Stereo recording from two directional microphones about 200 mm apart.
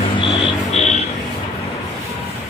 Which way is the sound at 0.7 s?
35° left (ahead or behind).